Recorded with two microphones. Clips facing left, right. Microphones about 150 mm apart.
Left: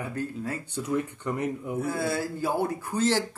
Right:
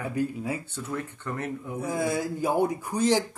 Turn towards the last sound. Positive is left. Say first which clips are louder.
# right 1 dB
turn(degrees=-15)  # may be behind; listen again after turning